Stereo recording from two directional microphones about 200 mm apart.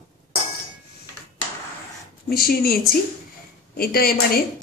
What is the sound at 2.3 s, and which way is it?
A woman's voice, 50° left (ahead or behind).